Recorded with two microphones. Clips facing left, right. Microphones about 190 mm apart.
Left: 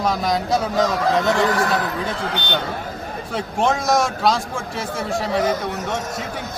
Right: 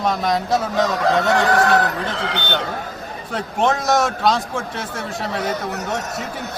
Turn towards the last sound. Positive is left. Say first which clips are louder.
# left 3 dB
turn(degrees=0)  # may be behind; listen again after turning